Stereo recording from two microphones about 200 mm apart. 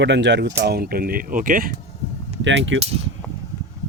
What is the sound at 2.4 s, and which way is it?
Speech, 65° right (ahead or behind).